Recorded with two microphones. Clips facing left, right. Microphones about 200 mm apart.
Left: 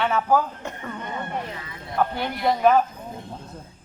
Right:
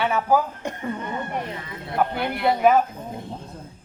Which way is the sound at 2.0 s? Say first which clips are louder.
Right 1 dB; 10° right (ahead or behind).